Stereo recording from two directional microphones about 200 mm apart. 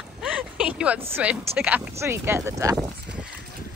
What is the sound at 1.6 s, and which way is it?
Speech, 10° right (ahead or behind).